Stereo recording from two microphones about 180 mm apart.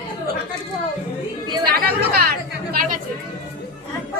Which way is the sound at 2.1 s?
60° right (ahead or behind).